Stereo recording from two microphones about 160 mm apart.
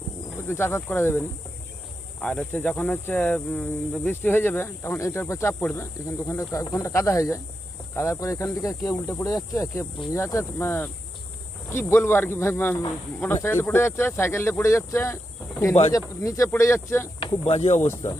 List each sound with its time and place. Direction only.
0.4 s speech: 15° left (ahead or behind)
17.2 s speech: 40° left (ahead or behind)
17.7 s speech: 15° left (ahead or behind)